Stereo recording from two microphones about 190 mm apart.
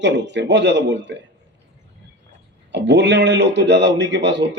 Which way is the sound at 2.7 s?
65° right (ahead or behind).